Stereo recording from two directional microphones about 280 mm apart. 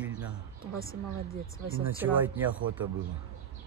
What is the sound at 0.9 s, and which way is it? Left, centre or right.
Speech, right.